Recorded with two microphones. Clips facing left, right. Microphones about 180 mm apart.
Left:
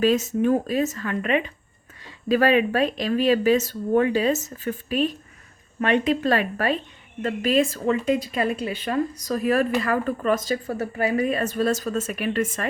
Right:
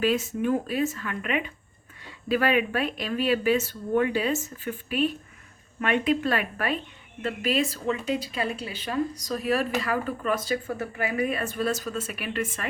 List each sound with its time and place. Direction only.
0.0 s speech: 45° left (ahead or behind)